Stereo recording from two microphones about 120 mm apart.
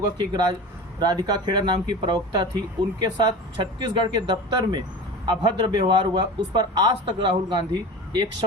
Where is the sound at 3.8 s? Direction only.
40° right (ahead or behind).